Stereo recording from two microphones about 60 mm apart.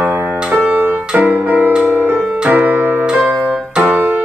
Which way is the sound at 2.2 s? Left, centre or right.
Centre.